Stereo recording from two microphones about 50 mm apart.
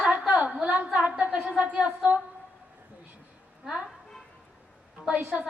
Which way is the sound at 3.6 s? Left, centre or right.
Centre.